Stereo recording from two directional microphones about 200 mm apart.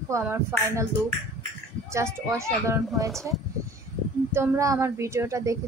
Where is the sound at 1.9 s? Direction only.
15° right (ahead or behind).